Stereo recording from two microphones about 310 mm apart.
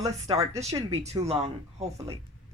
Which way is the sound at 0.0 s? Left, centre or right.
Centre.